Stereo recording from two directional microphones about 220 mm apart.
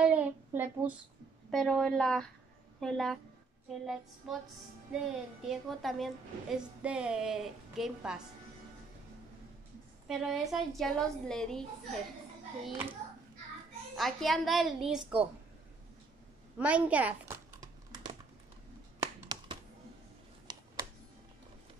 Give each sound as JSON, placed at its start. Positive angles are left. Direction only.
{"t": 0.0, "sound": "child singing", "side_deg": -5}
{"t": 1.5, "sound": "a woman's voice", "side_deg": 0}
{"t": 10.0, "sound": "a woman's voice", "side_deg": 0}
{"t": 13.9, "sound": "a woman's voice", "side_deg": 0}
{"t": 16.5, "sound": "crumpling", "side_deg": -5}
{"t": 18.9, "sound": "finger snapping", "side_deg": -20}
{"t": 20.5, "sound": "a sound", "side_deg": -20}